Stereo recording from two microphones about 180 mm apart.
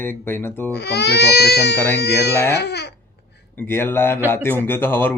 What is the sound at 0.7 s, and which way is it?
Speech, 65° left (ahead or behind).